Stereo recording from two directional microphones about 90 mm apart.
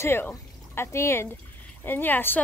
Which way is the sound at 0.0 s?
30° left (ahead or behind).